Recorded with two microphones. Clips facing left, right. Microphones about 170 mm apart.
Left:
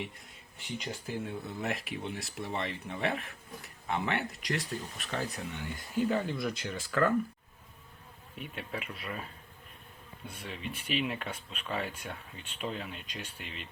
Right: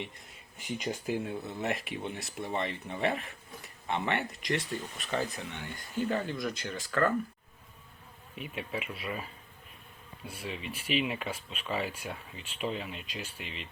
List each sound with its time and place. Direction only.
0.8 s speech: 15° right (ahead or behind)
1.1 s speech: centre (ahead or behind)
8.4 s speech: centre (ahead or behind)
10.4 s speech: centre (ahead or behind)